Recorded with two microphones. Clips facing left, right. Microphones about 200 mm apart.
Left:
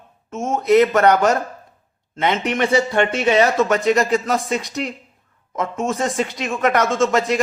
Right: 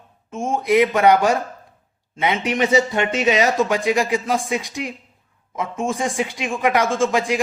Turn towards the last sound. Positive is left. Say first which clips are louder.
# left 2 dB
turn(degrees=-10)  # may be behind; listen again after turning